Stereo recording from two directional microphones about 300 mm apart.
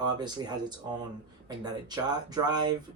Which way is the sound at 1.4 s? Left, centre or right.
Centre.